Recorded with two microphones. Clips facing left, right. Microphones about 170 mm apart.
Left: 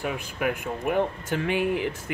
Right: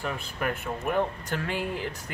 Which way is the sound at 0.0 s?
15° left (ahead or behind).